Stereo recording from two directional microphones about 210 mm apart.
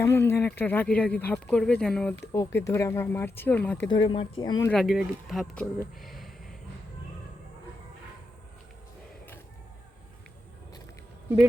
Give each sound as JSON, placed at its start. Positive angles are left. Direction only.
{"t": 0.0, "sound": "speech", "side_deg": 10}
{"t": 2.3, "sound": "speech", "side_deg": 15}
{"t": 3.8, "sound": "speech", "side_deg": 25}
{"t": 4.7, "sound": "speech", "side_deg": 0}
{"t": 6.0, "sound": "a sound", "side_deg": 0}